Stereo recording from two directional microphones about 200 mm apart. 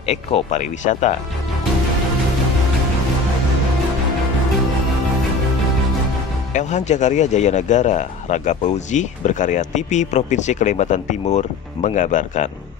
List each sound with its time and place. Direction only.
0.0 s speech: 30° left (ahead or behind)
6.5 s speech: 35° left (ahead or behind)